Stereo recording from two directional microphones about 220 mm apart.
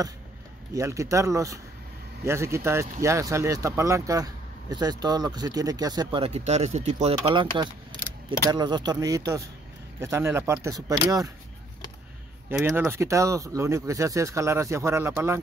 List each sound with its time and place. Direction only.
0.7 s speech: 15° right (ahead or behind)
12.4 s speech: 10° right (ahead or behind)